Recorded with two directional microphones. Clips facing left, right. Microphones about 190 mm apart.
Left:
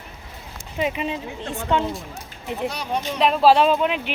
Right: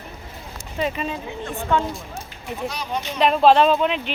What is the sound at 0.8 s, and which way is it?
Speech, 15° left (ahead or behind).